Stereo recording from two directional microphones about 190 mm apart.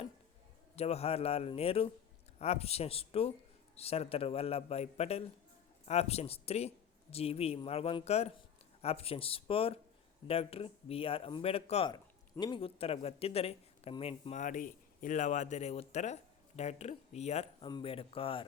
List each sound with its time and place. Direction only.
0.8 s speech: 35° left (ahead or behind)